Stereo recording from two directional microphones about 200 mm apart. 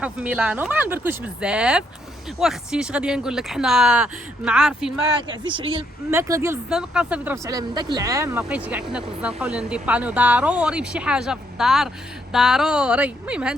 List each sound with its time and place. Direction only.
0.0 s speech: 5° right (ahead or behind)
5.4 s speech: 25° right (ahead or behind)
6.1 s speech: 15° right (ahead or behind)
6.7 s speech: 5° right (ahead or behind)